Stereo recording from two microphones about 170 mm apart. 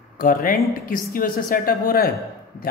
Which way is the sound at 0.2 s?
55° left (ahead or behind).